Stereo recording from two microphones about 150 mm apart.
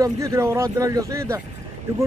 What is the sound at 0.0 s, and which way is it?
Speech, 20° right (ahead or behind).